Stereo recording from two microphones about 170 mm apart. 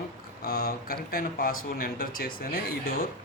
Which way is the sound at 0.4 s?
60° left (ahead or behind).